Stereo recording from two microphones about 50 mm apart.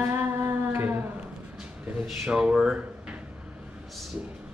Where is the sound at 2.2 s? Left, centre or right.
Right.